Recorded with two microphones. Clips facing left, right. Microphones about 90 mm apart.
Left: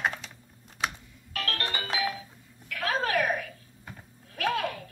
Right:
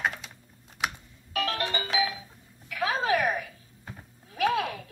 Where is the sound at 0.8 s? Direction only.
15° right (ahead or behind).